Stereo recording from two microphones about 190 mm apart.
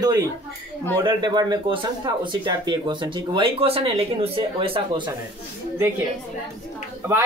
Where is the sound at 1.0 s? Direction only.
25° right (ahead or behind).